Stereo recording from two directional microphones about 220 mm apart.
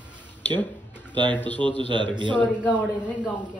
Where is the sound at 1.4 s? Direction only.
5° left (ahead or behind).